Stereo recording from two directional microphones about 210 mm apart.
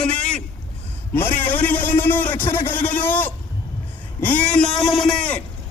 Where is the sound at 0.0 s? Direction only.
5° left (ahead or behind).